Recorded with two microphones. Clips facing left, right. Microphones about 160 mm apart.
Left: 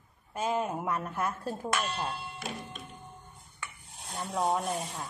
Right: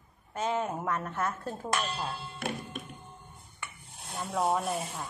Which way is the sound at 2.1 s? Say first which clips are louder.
Right 3 dB; 60° right (ahead or behind).